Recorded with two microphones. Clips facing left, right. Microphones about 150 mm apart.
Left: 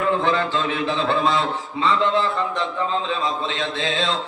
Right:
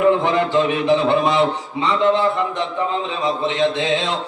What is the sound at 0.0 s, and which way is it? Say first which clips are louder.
Speech: right 5 dB; 20° right (ahead or behind).